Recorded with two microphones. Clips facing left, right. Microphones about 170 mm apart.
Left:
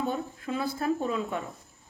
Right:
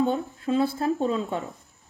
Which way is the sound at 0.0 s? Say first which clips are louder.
Right 6 dB; 25° right (ahead or behind).